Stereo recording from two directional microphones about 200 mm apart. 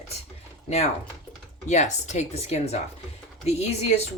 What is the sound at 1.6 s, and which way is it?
Speech, 35° left (ahead or behind).